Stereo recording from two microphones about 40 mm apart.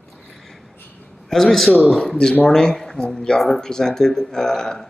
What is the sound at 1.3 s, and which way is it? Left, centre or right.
Speech, centre.